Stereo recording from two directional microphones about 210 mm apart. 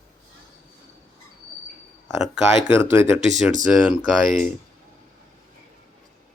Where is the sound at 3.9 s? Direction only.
Centre (ahead or behind).